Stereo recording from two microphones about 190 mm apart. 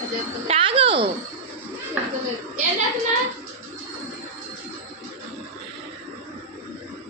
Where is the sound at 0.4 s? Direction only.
30° right (ahead or behind).